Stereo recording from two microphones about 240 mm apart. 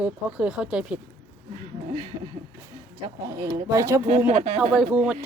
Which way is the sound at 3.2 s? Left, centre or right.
Centre.